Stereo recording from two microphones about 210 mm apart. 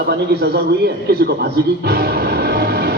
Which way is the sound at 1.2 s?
50° right (ahead or behind).